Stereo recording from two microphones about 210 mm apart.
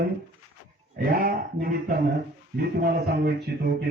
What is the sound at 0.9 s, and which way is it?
A man's voice, 45° right (ahead or behind).